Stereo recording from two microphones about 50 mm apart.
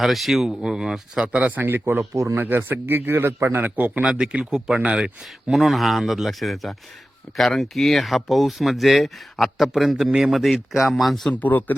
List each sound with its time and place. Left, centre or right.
0.0 s speech: centre
1.2 s speech: right
1.6 s a man's voice: right
4.0 s speech: centre
5.5 s speech: centre
10.1 s speech: centre
10.3 s speech: centre
11.3 s speech: left